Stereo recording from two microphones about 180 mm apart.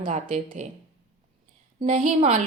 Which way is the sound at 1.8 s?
35° right (ahead or behind).